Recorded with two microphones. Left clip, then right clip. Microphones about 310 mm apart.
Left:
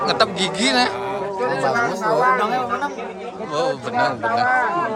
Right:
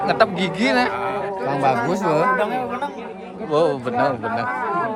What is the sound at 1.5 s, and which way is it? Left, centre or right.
Chatter, right.